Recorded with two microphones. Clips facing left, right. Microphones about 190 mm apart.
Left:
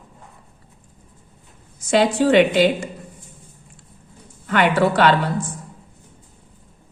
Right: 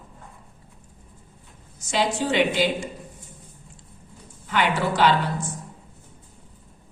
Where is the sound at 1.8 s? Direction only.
60° left (ahead or behind).